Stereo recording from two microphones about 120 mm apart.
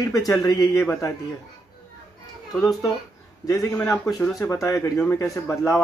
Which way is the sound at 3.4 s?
30° left (ahead or behind).